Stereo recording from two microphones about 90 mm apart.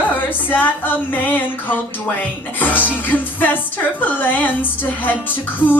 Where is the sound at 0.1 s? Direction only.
20° left (ahead or behind).